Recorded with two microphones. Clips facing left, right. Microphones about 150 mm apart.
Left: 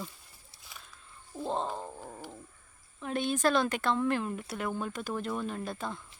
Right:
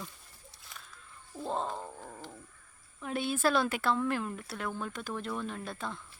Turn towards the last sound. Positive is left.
turn(degrees=0)  # may be behind; listen again after turning